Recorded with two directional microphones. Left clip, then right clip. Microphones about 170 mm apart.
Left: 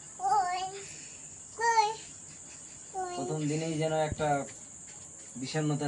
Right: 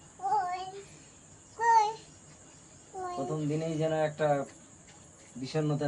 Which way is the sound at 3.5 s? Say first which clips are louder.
Even; 10° left (ahead or behind).